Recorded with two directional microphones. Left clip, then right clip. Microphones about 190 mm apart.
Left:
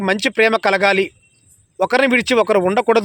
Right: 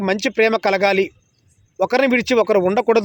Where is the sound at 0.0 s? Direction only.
Centre (ahead or behind).